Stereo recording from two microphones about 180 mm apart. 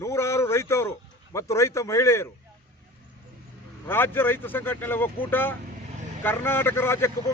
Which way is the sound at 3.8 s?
10° left (ahead or behind).